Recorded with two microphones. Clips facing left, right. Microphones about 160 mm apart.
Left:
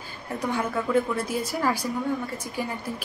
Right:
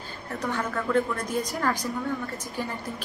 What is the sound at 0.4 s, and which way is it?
A woman's voice, 10° left (ahead or behind).